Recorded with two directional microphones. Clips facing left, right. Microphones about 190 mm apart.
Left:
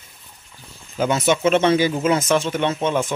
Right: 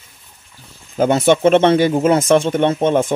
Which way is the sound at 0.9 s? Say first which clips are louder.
Right 6 dB; 55° right (ahead or behind).